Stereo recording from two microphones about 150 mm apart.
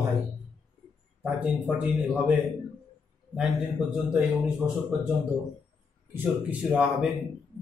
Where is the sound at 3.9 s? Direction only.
5° right (ahead or behind).